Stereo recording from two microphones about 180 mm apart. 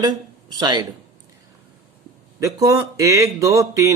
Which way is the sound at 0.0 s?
25° right (ahead or behind).